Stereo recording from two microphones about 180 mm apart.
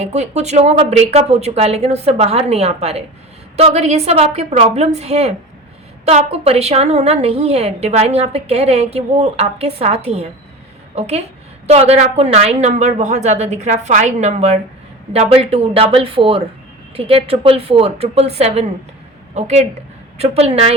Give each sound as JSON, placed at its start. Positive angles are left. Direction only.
{"t": 0.0, "sound": "a woman's voice", "side_deg": -35}